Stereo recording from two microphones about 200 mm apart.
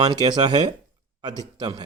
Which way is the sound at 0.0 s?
20° right (ahead or behind).